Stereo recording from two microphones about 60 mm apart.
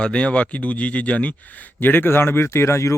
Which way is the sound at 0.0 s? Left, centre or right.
Centre.